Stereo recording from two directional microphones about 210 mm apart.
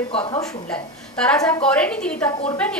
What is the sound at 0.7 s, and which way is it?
Speech, 5° left (ahead or behind).